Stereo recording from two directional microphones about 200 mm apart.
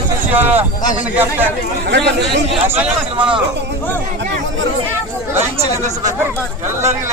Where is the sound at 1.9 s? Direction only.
60° right (ahead or behind).